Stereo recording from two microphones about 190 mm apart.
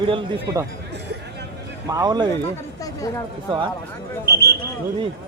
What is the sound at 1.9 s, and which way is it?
Speech, 20° right (ahead or behind).